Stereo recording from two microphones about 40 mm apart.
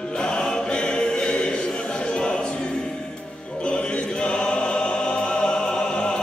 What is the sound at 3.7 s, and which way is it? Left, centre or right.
Music, left.